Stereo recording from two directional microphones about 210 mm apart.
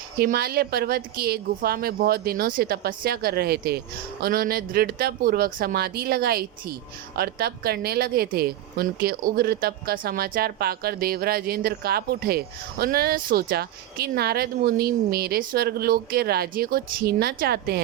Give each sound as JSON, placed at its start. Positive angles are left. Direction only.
{"t": 0.2, "sound": "speech", "side_deg": -45}